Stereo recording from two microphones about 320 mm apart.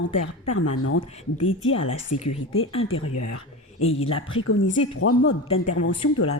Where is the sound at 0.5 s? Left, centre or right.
Left.